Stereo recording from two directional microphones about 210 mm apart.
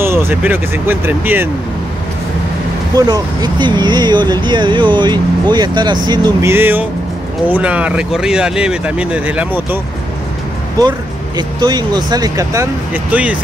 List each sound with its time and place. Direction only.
0.0 s speech: 10° right (ahead or behind)
3.0 s speech: 20° right (ahead or behind)
10.8 s speech: 20° right (ahead or behind)